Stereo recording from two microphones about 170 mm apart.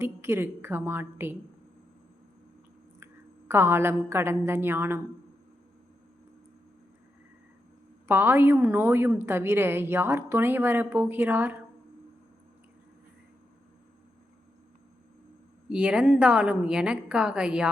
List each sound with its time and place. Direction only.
0.0 s a woman's voice: 15° right (ahead or behind)
3.5 s a woman's voice: 15° right (ahead or behind)
8.0 s a woman's voice: 10° right (ahead or behind)
15.7 s a woman's voice: 5° right (ahead or behind)